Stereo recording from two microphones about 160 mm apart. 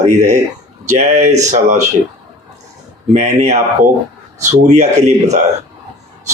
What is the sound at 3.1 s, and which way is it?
Speech, 45° right (ahead or behind).